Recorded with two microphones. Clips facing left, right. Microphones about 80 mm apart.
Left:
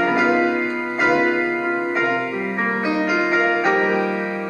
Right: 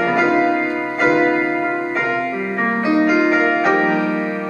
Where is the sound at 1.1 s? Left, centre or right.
Right.